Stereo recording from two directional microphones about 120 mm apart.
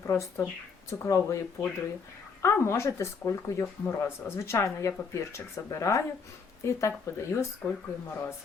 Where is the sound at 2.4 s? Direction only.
20° left (ahead or behind).